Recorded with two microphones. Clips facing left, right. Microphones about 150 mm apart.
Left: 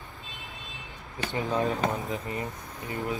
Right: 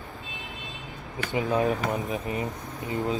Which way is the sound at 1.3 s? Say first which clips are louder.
Right 3 dB; 20° right (ahead or behind).